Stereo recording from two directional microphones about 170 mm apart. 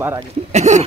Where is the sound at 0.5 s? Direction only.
40° right (ahead or behind).